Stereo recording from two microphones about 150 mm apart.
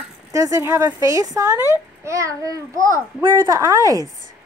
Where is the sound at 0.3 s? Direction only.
20° right (ahead or behind).